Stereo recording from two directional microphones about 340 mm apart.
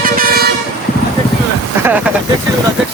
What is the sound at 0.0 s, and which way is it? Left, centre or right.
Vehicle, right.